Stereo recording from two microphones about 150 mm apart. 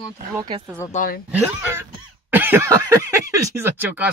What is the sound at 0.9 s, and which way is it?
Speech, 75° left (ahead or behind).